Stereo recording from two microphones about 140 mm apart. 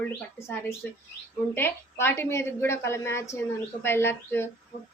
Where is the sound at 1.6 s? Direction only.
15° left (ahead or behind).